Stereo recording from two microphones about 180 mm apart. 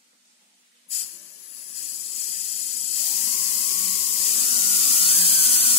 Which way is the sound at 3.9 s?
35° left (ahead or behind).